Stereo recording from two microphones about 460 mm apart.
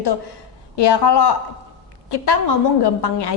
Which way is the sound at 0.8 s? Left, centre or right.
Left.